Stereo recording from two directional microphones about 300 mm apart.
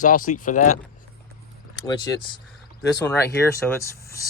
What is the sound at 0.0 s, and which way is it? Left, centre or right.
Speech, left.